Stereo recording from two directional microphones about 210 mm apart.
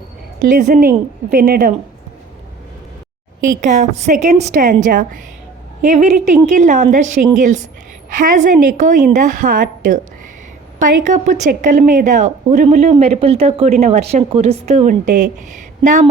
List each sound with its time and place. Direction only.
0.5 s a woman's voice: 40° right (ahead or behind)
3.6 s a woman's voice: 35° right (ahead or behind)